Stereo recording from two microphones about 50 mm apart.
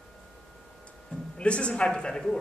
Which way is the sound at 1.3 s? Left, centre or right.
Left.